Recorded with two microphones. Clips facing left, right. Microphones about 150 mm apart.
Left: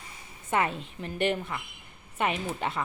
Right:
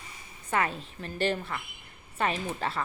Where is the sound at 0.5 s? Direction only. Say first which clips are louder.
Left 1 dB; 25° left (ahead or behind).